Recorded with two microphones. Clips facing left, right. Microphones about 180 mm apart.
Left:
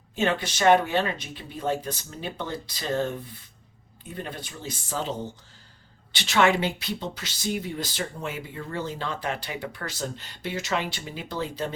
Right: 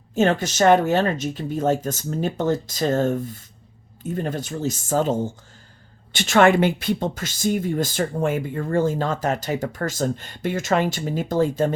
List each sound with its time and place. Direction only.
0.1 s speech: 45° right (ahead or behind)